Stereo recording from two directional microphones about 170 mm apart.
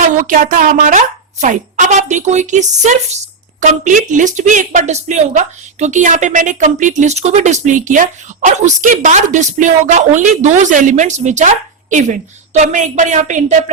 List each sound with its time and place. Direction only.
0.0 s a woman's voice: 50° right (ahead or behind)